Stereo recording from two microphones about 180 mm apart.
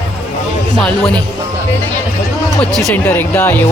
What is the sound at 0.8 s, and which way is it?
Speech, 5° left (ahead or behind).